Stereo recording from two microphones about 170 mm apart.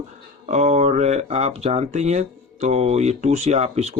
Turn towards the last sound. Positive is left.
turn(degrees=-40)  # may be behind; listen again after turning